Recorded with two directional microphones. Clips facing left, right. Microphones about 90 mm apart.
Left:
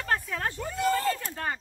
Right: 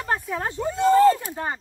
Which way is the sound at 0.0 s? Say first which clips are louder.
Right 3 dB; 20° right (ahead or behind).